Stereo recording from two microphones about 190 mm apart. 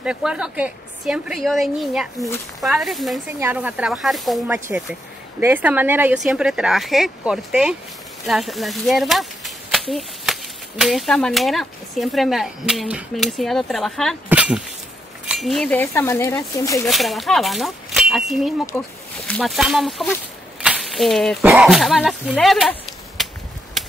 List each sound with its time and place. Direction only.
0.0 s speech: 5° right (ahead or behind)
15.8 s speech: 15° left (ahead or behind)
16.8 s speech: centre (ahead or behind)
20.6 s a sound: centre (ahead or behind)
21.5 s speech: 5° right (ahead or behind)
23.8 s a sound: centre (ahead or behind)